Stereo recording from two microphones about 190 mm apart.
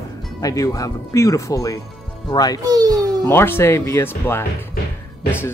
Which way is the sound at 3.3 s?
10° left (ahead or behind).